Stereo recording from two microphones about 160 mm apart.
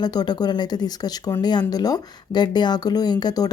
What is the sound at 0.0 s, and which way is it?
Speech, 25° left (ahead or behind).